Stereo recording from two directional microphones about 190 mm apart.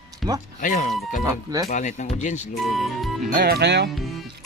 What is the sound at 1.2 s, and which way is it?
Speech, 20° right (ahead or behind).